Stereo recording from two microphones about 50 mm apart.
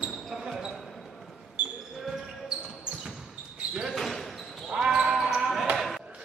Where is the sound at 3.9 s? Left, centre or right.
Centre.